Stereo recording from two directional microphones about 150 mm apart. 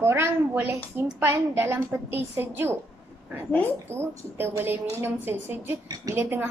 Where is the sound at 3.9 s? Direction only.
15° right (ahead or behind).